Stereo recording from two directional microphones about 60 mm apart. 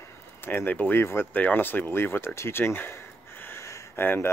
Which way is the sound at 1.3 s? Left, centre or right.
Left.